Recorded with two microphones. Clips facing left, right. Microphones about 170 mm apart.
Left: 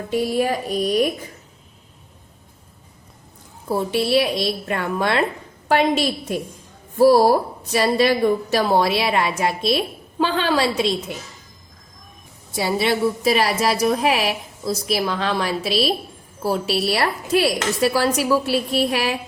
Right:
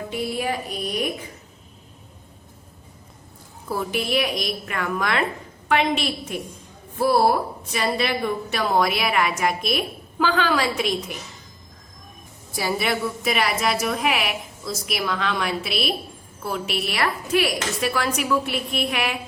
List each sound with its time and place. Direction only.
0.1 s a woman's voice: 40° left (ahead or behind)
3.7 s a woman's voice: 30° left (ahead or behind)
12.5 s a woman's voice: 25° left (ahead or behind)